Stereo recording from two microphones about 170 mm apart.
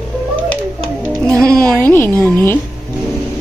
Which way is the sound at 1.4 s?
5° left (ahead or behind).